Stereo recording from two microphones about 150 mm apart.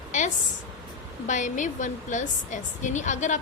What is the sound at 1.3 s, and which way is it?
A woman's voice, 55° left (ahead or behind).